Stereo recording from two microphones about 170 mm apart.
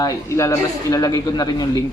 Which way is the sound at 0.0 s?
15° left (ahead or behind).